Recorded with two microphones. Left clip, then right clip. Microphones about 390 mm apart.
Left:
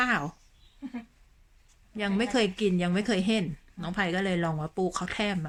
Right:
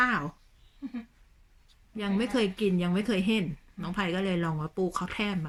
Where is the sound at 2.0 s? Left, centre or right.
Centre.